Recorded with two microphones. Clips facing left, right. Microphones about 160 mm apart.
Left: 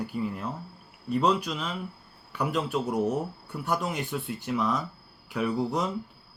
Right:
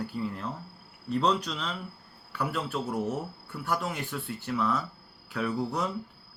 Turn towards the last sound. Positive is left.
turn(degrees=15)  # may be behind; listen again after turning